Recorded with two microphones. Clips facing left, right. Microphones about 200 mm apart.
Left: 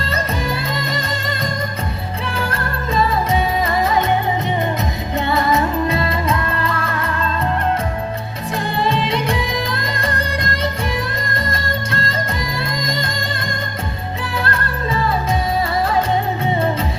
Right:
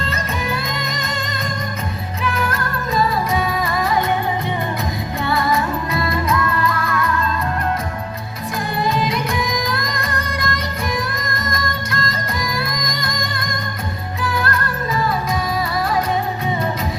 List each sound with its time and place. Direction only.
0.1 s music: 35° left (ahead or behind)
2.2 s music: 30° left (ahead or behind)
5.2 s music: 25° left (ahead or behind)
8.8 s music: 25° left (ahead or behind)